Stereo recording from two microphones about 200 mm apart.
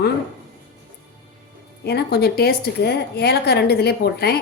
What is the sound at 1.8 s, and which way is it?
A woman's voice, 55° left (ahead or behind).